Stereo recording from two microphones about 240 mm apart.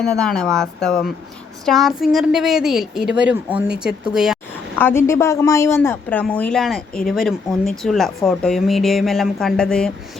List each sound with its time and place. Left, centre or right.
0.0 s speech: centre
4.8 s a woman's voice: centre